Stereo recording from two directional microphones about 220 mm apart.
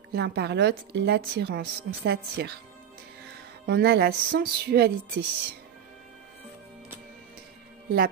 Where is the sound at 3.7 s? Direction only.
45° right (ahead or behind).